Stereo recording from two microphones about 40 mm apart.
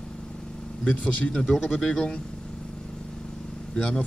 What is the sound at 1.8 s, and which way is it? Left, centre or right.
Speech, left.